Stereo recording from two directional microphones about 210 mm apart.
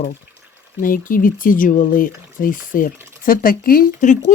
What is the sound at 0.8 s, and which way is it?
Speech, 40° left (ahead or behind).